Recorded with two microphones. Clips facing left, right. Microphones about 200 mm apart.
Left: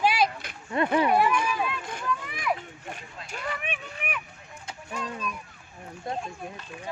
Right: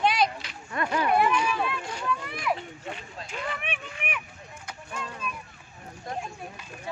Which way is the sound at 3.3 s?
40° left (ahead or behind).